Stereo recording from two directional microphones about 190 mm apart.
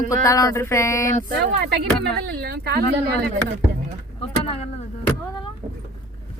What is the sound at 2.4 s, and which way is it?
Speech, 55° right (ahead or behind).